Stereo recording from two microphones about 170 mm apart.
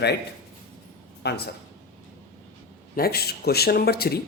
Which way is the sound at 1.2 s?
75° left (ahead or behind).